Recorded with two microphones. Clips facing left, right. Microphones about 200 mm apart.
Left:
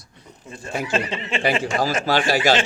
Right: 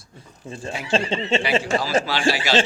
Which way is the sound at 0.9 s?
25° right (ahead or behind).